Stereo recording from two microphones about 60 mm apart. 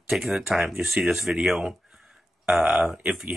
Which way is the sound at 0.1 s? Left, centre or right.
Centre.